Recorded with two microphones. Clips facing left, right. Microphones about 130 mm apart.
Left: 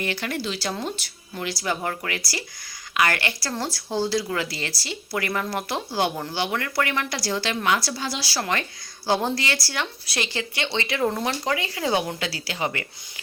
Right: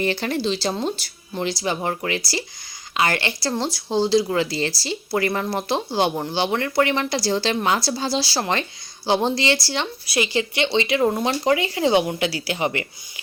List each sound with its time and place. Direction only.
0.0 s speech: 30° right (ahead or behind)
10.1 s speech: 10° right (ahead or behind)